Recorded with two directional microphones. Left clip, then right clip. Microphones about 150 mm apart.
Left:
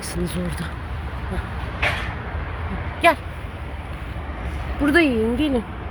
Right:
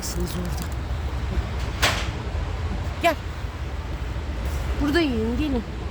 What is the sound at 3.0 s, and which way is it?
Speech, 25° left (ahead or behind).